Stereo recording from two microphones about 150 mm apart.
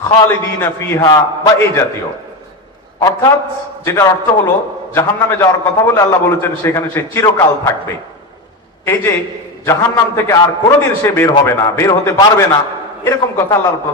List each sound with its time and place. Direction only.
0.0 s a man's voice: 15° left (ahead or behind)
3.0 s a man's voice: 20° left (ahead or behind)
8.8 s a man's voice: 15° left (ahead or behind)
10.2 s a man's voice: 20° left (ahead or behind)